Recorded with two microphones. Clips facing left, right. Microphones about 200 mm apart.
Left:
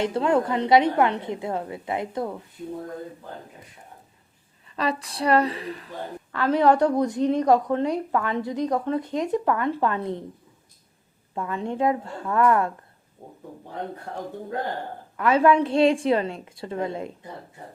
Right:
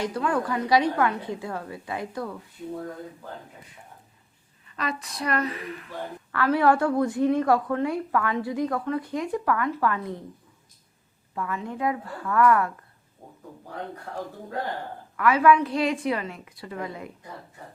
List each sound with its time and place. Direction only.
0.0 s a woman's voice: 25° left (ahead or behind)
4.8 s speech: 30° left (ahead or behind)
6.3 s a woman's voice: 20° left (ahead or behind)
11.3 s a woman's voice: 25° left (ahead or behind)
15.1 s a woman's voice: 25° left (ahead or behind)